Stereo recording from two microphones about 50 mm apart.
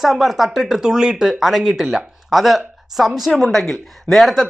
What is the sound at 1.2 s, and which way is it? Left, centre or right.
Speech, centre.